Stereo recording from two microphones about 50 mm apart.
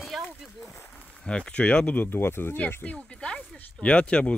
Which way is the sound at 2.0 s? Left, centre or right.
Left.